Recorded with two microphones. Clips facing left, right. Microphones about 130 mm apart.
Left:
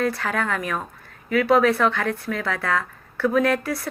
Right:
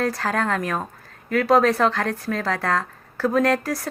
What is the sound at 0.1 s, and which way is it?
A woman's voice, 35° right (ahead or behind).